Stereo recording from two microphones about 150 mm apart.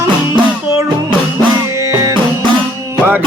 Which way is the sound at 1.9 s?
20° right (ahead or behind).